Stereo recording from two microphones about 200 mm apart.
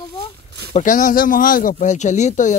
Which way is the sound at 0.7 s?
35° left (ahead or behind).